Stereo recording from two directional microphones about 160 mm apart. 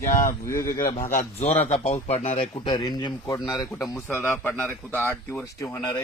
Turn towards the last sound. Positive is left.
turn(degrees=15)  # may be behind; listen again after turning